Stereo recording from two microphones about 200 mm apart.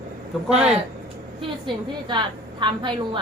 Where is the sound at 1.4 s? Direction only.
25° right (ahead or behind).